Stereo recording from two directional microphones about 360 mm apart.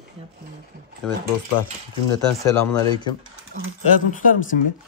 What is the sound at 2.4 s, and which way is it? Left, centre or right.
Speech, centre.